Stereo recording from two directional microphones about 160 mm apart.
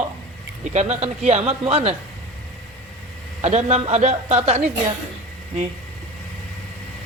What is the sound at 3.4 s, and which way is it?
A man's voice, 45° right (ahead or behind).